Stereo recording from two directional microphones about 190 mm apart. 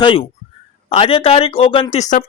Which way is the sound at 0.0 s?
25° left (ahead or behind).